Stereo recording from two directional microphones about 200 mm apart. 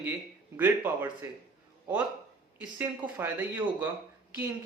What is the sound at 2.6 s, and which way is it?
Speech, 10° right (ahead or behind).